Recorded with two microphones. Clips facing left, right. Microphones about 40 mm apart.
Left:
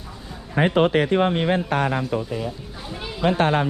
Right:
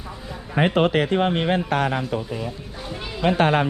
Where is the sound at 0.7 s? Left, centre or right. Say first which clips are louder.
Left 2 dB; right.